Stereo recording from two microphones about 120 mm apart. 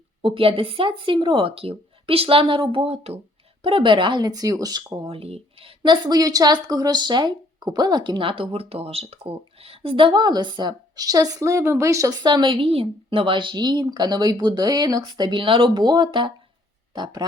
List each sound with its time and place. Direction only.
0.2 s speech: 50° right (ahead or behind)
3.6 s a woman's voice: 45° right (ahead or behind)
5.0 s a woman's voice: 55° right (ahead or behind); by 17.2 s 35° right (ahead or behind)